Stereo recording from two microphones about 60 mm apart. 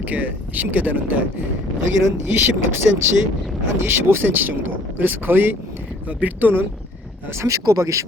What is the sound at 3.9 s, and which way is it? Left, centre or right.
Speech, right.